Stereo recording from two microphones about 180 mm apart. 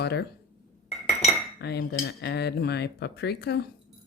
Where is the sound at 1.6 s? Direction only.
65° left (ahead or behind).